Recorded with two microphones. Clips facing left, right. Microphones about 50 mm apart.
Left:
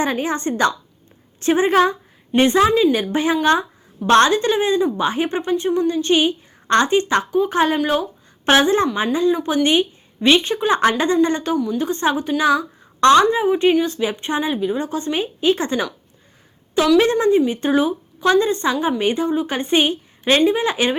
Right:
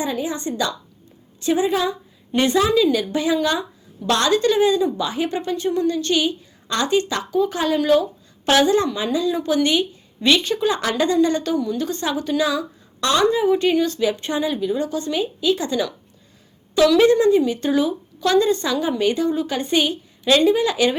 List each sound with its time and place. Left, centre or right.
0.0 s a woman's voice: left
2.3 s a woman's voice: left
11.5 s a woman's voice: centre
11.8 s a woman's voice: left
13.4 s a woman's voice: left
17.0 s a woman's voice: left